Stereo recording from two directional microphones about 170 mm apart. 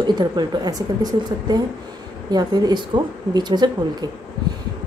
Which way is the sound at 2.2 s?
25° right (ahead or behind).